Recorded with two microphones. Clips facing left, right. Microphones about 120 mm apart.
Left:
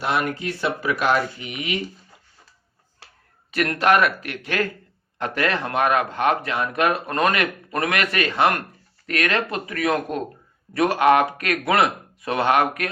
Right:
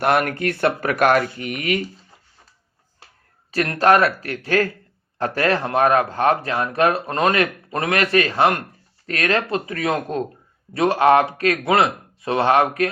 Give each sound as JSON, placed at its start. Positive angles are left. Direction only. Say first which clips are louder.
{"t": 0.0, "sound": "speech", "louder": "right 5 dB", "side_deg": -60}
{"t": 3.5, "sound": "speech", "louder": "right 3 dB", "side_deg": -30}